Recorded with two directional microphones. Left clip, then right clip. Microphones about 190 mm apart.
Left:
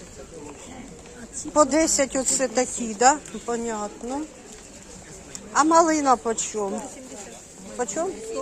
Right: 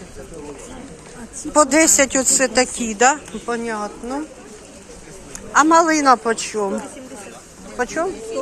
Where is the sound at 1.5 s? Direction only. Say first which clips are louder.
Right 5 dB; 5° left (ahead or behind).